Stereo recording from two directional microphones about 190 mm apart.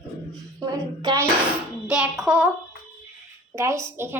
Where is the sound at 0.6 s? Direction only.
20° right (ahead or behind).